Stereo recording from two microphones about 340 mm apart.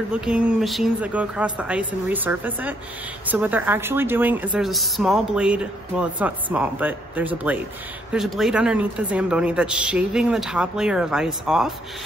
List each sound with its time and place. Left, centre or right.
0.1 s speech: centre